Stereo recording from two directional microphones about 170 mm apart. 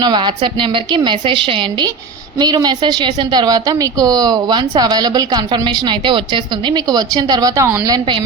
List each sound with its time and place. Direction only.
0.0 s a woman's voice: 25° right (ahead or behind)